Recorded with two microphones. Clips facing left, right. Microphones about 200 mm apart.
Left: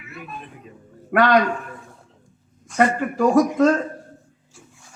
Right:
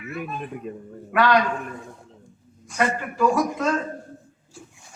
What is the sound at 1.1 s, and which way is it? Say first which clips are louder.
Speech: left 3 dB; 50° left (ahead or behind).